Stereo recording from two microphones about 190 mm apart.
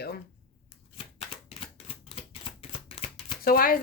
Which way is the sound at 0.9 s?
30° left (ahead or behind).